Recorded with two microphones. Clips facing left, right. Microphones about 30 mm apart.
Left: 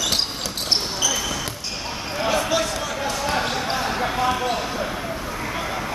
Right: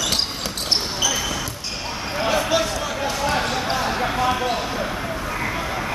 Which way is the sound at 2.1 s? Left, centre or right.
Centre.